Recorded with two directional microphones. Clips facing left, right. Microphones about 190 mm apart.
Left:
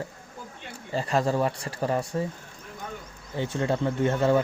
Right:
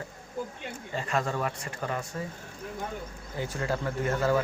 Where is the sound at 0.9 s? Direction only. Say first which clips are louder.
Left 6 dB; 35° left (ahead or behind).